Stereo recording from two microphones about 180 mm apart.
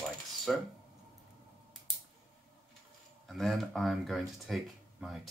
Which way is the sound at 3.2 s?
Centre (ahead or behind).